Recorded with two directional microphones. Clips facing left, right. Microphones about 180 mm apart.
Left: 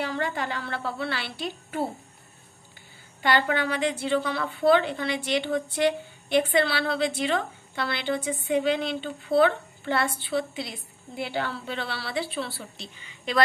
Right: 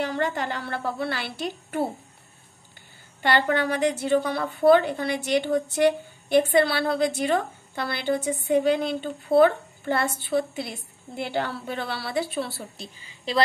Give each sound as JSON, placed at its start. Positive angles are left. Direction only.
{"t": 0.0, "sound": "a woman's voice", "side_deg": -45}
{"t": 3.2, "sound": "a woman's voice", "side_deg": -45}